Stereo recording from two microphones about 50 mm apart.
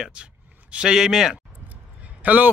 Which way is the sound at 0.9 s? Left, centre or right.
Centre.